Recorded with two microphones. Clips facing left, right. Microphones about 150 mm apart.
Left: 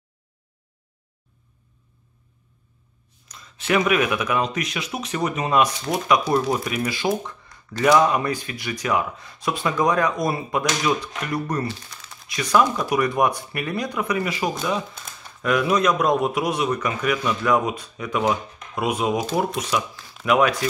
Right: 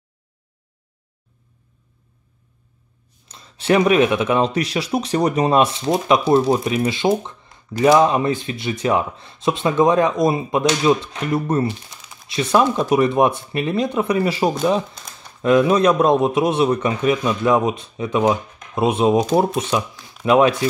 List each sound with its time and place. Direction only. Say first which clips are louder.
3.3 s speech: right 6 dB; 30° right (ahead or behind)
15.4 s speech: right 6 dB; 30° right (ahead or behind)